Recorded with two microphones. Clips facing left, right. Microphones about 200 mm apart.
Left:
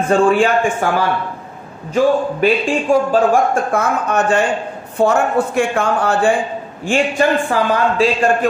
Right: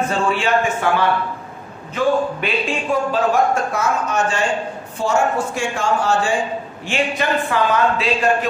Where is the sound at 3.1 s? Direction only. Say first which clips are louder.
Left 4 dB; 50° left (ahead or behind).